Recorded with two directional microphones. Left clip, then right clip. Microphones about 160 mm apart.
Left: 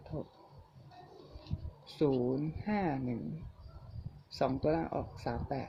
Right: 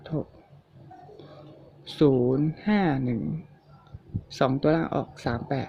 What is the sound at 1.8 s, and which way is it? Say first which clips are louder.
Speech: right 10 dB; 40° right (ahead or behind).